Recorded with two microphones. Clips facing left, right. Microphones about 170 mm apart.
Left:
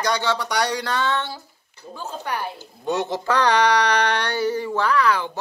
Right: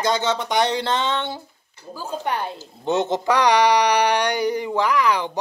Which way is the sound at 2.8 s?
20° right (ahead or behind).